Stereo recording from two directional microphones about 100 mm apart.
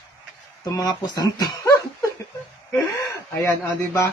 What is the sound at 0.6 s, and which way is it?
A man's voice, 45° left (ahead or behind).